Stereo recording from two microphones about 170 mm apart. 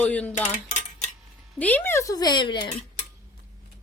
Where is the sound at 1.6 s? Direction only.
10° left (ahead or behind); by 2.8 s 30° left (ahead or behind).